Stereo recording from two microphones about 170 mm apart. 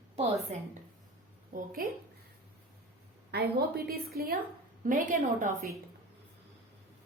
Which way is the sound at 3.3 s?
70° right (ahead or behind).